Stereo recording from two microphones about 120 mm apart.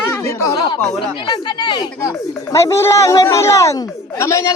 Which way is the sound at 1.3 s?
40° left (ahead or behind).